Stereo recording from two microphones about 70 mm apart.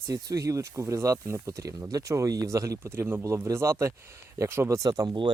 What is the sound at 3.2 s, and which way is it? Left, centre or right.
Speech, right.